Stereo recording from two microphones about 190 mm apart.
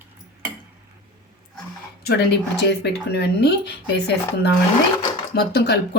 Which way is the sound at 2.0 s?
60° left (ahead or behind).